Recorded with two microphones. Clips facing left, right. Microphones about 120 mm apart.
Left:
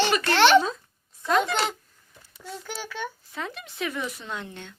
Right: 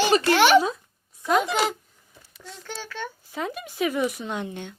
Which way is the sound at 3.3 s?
10° right (ahead or behind).